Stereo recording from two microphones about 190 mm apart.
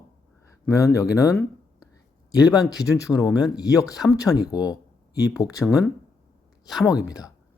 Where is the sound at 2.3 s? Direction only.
20° left (ahead or behind).